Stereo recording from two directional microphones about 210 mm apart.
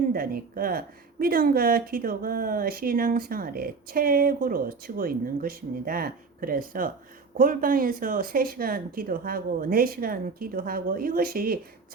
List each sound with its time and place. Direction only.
0.1 s speech: 45° right (ahead or behind)